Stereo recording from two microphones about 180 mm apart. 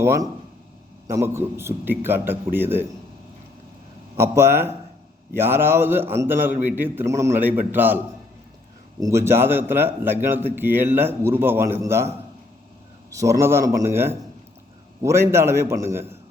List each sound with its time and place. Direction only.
0.0 s a man's voice: 15° right (ahead or behind)
4.2 s a man's voice: 15° right (ahead or behind)
13.1 s a man's voice: 15° right (ahead or behind)